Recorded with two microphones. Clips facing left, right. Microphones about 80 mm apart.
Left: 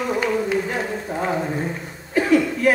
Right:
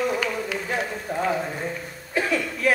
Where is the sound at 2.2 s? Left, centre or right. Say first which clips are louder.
Left 7 dB; left.